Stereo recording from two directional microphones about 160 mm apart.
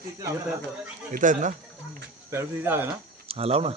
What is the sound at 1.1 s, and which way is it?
Speech, 55° right (ahead or behind).